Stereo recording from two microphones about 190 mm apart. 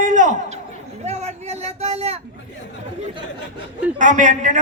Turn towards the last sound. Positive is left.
turn(degrees=-40)  # may be behind; listen again after turning